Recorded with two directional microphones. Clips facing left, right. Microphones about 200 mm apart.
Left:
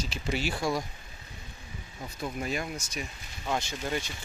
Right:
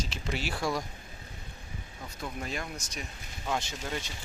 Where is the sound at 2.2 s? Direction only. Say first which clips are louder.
Left 4 dB; 10° left (ahead or behind).